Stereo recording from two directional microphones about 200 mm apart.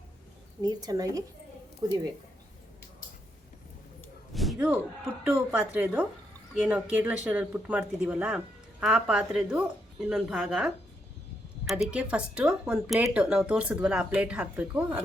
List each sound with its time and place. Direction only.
0.6 s speech: 20° right (ahead or behind)
4.4 s slam: centre (ahead or behind)
5.2 s speech: 5° right (ahead or behind)